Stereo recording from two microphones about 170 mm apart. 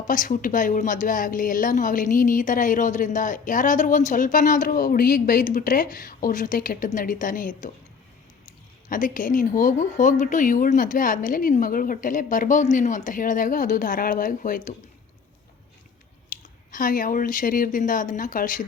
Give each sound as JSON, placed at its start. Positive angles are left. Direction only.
{"t": 0.1, "sound": "a woman's voice", "side_deg": 50}
{"t": 8.9, "sound": "a woman's voice", "side_deg": 50}
{"t": 16.3, "sound": "a sound", "side_deg": 50}
{"t": 16.7, "sound": "a woman's voice", "side_deg": 55}